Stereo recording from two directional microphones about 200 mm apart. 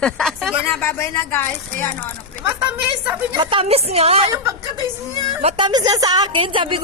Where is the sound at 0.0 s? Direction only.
Centre (ahead or behind).